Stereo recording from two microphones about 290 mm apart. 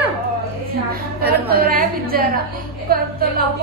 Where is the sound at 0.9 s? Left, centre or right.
Right.